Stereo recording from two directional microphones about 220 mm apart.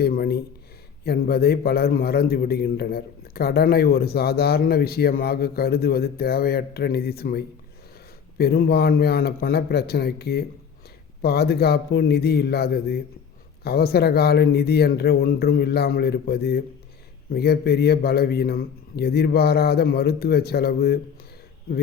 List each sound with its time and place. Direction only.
0.0 s a man's voice: 45° left (ahead or behind)